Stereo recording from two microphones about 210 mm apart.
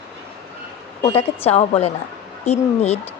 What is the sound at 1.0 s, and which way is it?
A woman's voice, 30° left (ahead or behind).